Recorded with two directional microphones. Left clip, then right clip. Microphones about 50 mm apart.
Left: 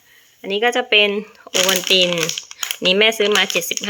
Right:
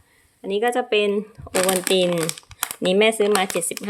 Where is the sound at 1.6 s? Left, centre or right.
Centre.